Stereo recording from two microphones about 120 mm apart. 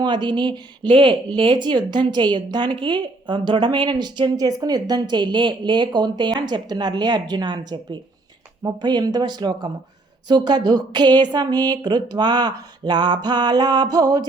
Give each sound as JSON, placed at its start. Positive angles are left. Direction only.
{"t": 0.0, "sound": "speech", "side_deg": -40}